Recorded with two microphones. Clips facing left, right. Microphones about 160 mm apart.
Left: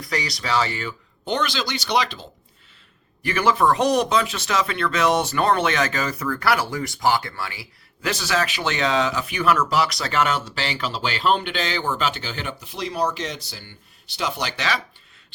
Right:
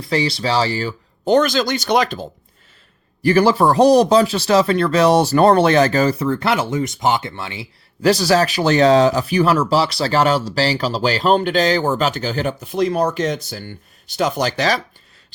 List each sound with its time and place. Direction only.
0.0 s speech: 30° right (ahead or behind); by 2.2 s 50° right (ahead or behind)
3.2 s speech: 35° right (ahead or behind)
8.0 s speech: 35° right (ahead or behind)